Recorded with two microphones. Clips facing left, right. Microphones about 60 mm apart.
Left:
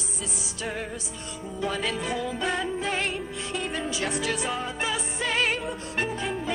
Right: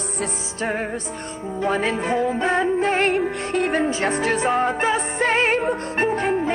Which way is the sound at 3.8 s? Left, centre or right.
Right.